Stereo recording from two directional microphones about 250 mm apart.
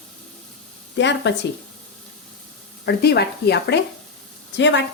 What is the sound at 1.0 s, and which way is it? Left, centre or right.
Speech, left.